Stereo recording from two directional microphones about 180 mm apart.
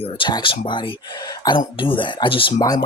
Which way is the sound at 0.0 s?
25° left (ahead or behind).